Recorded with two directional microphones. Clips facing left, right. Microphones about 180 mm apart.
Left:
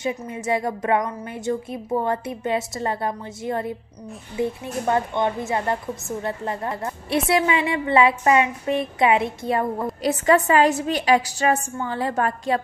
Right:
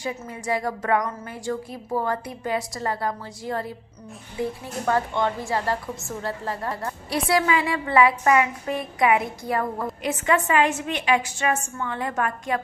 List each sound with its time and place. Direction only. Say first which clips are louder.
0.0 s a woman's voice: left 4 dB; 20° left (ahead or behind)
10.0 s a woman's voice: left 5 dB; 35° left (ahead or behind)